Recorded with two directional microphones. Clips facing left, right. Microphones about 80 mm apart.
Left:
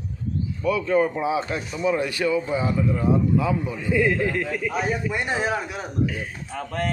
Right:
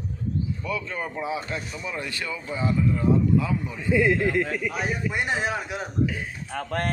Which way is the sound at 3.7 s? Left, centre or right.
Centre.